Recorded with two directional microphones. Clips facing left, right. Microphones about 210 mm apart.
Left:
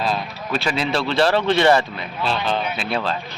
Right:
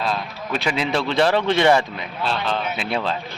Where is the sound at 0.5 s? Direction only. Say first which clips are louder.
Even; 15° right (ahead or behind).